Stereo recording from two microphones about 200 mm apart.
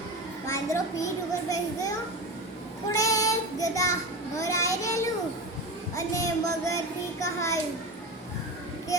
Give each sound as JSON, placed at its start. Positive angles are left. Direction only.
{"t": 0.4, "sound": "a child's voice", "side_deg": 15}
{"t": 2.9, "sound": "a child's voice", "side_deg": 15}
{"t": 6.1, "sound": "a child's voice", "side_deg": 15}
{"t": 8.9, "sound": "a child's voice", "side_deg": 15}